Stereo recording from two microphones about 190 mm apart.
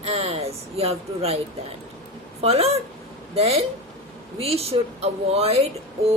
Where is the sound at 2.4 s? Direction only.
30° right (ahead or behind).